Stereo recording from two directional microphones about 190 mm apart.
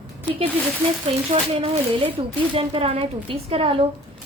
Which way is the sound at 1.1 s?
30° right (ahead or behind).